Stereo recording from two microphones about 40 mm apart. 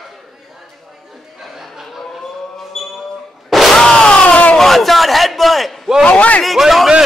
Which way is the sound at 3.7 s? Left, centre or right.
Centre.